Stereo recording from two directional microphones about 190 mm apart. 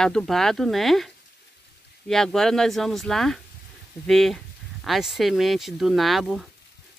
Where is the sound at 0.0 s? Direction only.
5° left (ahead or behind).